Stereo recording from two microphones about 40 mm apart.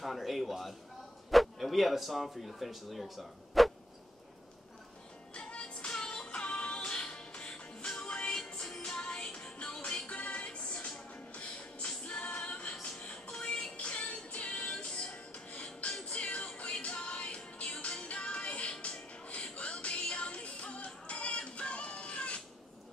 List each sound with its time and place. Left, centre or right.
0.0 s speech: centre
5.3 s music: left
8.4 s music: centre
8.9 s music: left
12.0 s music: left